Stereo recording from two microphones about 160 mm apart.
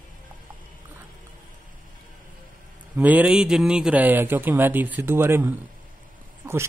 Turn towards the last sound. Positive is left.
turn(degrees=-15)  # may be behind; listen again after turning